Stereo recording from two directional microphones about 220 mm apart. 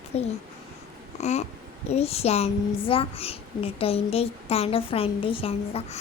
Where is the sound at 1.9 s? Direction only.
25° left (ahead or behind).